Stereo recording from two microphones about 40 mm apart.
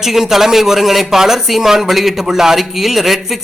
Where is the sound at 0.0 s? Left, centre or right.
Centre.